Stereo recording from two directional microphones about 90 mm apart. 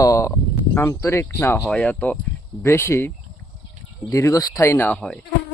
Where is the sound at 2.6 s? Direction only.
30° left (ahead or behind).